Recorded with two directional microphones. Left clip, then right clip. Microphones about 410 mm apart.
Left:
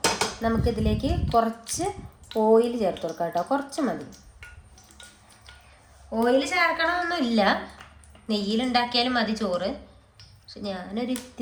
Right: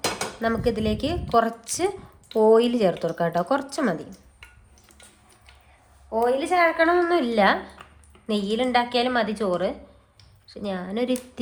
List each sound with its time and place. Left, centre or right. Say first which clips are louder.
0.4 s speech: right 5 dB; right
6.2 s a woman's voice: right 1 dB; centre